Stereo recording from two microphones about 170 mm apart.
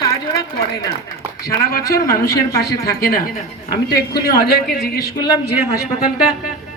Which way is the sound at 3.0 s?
60° left (ahead or behind).